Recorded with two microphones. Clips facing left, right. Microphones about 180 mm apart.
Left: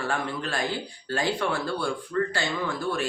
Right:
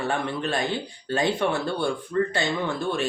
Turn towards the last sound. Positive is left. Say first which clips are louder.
# right 2 dB
turn(degrees=-25)  # may be behind; listen again after turning